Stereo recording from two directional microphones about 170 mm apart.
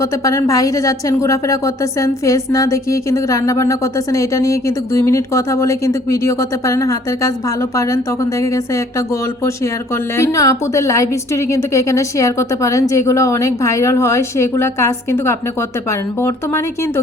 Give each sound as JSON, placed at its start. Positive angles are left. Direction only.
{"t": 0.0, "sound": "a woman's voice", "side_deg": 20}